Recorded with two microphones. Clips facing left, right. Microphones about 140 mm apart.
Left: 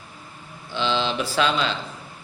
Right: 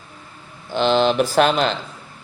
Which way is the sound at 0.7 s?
50° right (ahead or behind).